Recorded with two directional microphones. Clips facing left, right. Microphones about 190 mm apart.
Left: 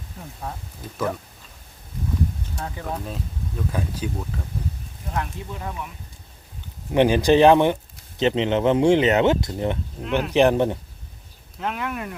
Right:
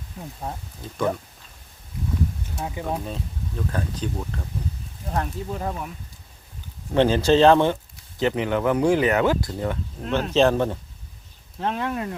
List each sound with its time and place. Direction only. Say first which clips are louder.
0.8 s speech: even; 25° right (ahead or behind)
2.6 s speech: right 3 dB; 10° right (ahead or behind)
3.7 s speech: left 1 dB; 10° left (ahead or behind)
5.1 s speech: right 2 dB; 40° right (ahead or behind)
6.9 s speech: left 1 dB; 15° left (ahead or behind)
11.6 s speech: right 2 dB; 30° right (ahead or behind)